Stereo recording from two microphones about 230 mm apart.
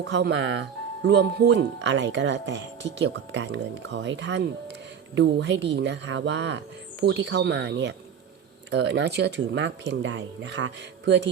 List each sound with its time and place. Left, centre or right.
0.0 s speech: right